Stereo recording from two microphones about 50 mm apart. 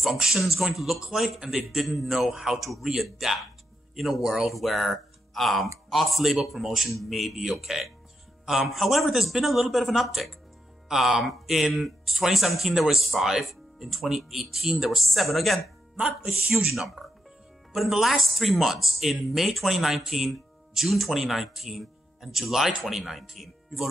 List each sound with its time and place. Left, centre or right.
0.0 s speech: centre
16.0 s speech: right
16.5 s speech: centre